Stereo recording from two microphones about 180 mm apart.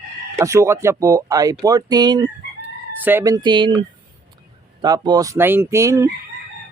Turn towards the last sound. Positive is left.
turn(degrees=-15)  # may be behind; listen again after turning